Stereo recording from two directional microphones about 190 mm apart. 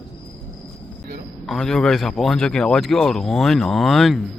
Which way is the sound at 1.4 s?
Centre (ahead or behind).